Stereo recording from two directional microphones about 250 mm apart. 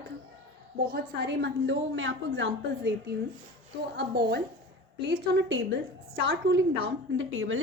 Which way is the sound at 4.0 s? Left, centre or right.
Right.